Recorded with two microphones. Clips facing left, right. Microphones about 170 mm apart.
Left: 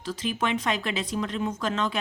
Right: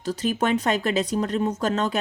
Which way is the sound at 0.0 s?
40° right (ahead or behind).